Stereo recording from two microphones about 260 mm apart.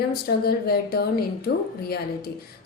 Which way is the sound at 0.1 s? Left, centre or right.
Left.